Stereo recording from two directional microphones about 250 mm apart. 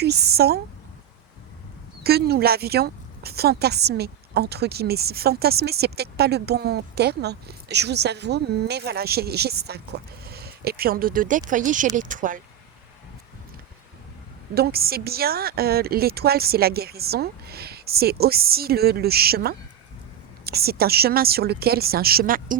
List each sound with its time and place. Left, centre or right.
0.0 s a woman's voice: right
2.0 s a woman's voice: right
14.5 s a woman's voice: right